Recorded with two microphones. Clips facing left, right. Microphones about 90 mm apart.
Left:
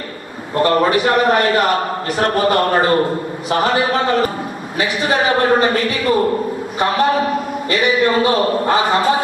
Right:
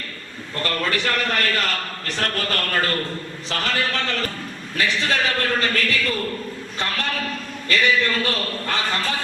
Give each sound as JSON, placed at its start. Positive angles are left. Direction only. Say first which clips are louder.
{"t": 0.5, "sound": "a man's voice", "louder": "left 11 dB", "side_deg": 20}